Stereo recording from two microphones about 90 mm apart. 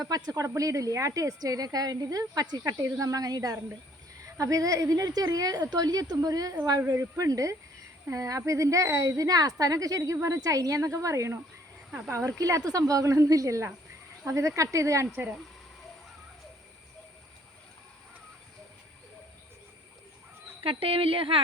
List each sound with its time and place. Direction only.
0.0 s a woman's voice: 40° right (ahead or behind)
15.1 s speech: 25° right (ahead or behind)
20.7 s a woman's voice: 90° right